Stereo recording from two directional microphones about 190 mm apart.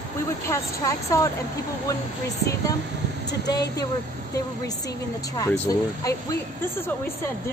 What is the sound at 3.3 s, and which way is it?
Speech, 20° left (ahead or behind).